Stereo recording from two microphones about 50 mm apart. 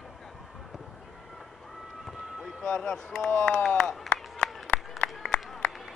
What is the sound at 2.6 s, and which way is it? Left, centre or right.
Speech, centre.